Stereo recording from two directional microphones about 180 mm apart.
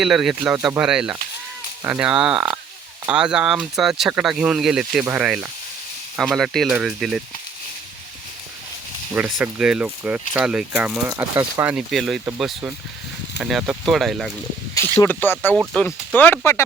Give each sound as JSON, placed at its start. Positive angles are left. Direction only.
{"t": 0.0, "sound": "speech", "side_deg": 0}
{"t": 9.1, "sound": "speech", "side_deg": -10}
{"t": 11.1, "sound": "speech", "side_deg": -20}
{"t": 11.7, "sound": "speech", "side_deg": 0}
{"t": 14.9, "sound": "speech", "side_deg": 10}